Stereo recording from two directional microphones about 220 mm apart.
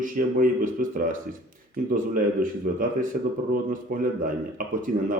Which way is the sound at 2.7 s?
40° right (ahead or behind).